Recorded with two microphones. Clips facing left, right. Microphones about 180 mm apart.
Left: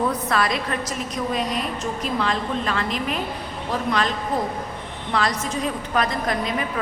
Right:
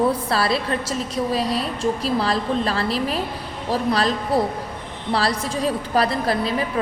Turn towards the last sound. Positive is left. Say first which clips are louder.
# right 3 dB
turn(degrees=-30)  # may be behind; listen again after turning